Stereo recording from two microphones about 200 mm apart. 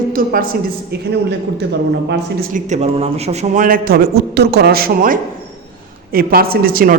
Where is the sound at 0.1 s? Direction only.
45° right (ahead or behind).